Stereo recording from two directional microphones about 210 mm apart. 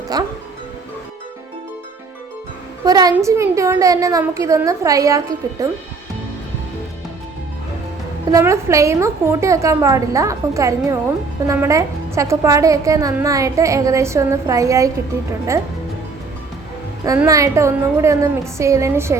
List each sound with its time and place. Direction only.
0.1 s a woman's voice: 20° right (ahead or behind)
2.8 s a woman's voice: 20° right (ahead or behind)
8.3 s a woman's voice: 15° right (ahead or behind)
17.0 s a woman's voice: 15° right (ahead or behind)